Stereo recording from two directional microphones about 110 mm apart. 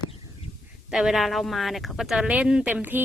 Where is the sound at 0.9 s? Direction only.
5° right (ahead or behind).